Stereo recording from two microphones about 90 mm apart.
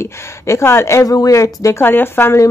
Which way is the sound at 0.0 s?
30° left (ahead or behind).